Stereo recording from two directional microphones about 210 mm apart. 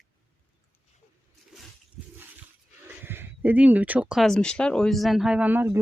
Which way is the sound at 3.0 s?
10° right (ahead or behind).